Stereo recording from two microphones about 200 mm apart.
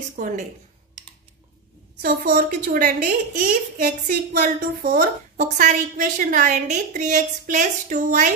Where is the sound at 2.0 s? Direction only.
45° right (ahead or behind).